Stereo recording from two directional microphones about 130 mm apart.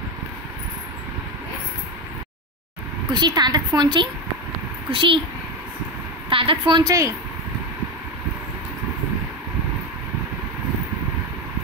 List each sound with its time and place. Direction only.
3.1 s a woman's voice: 35° right (ahead or behind)
6.3 s a woman's voice: 45° right (ahead or behind)
6.8 s speech: 25° right (ahead or behind)